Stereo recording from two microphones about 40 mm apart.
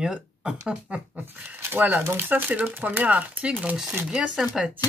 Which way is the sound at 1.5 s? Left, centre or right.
Right.